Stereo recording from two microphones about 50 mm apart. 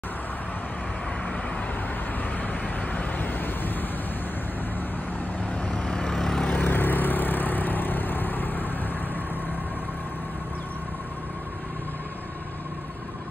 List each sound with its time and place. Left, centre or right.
2.4 s vehicle: left
5.6 s vehicle: left
6.4 s vehicle: left